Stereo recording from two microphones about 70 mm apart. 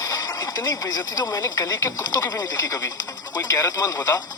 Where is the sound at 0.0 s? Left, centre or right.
Left.